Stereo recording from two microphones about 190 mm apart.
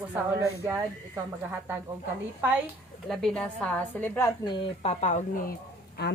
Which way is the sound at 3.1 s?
5° left (ahead or behind).